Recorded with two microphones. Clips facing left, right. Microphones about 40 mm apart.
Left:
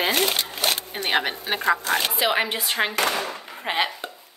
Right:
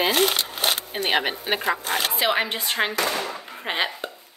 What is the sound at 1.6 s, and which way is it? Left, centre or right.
Speech, centre.